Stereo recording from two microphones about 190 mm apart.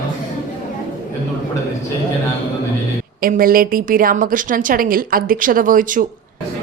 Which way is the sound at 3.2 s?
50° right (ahead or behind).